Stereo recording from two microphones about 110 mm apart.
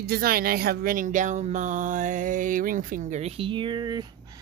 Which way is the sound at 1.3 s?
90° right.